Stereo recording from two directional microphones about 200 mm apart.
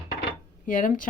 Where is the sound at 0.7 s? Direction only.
40° left (ahead or behind).